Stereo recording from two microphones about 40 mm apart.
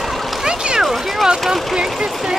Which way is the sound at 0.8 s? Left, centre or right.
Centre.